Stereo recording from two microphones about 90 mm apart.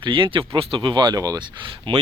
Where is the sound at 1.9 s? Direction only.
75° right (ahead or behind).